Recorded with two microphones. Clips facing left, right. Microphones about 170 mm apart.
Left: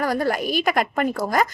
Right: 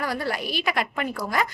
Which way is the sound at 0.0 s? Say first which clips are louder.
Left 6 dB; 45° left (ahead or behind).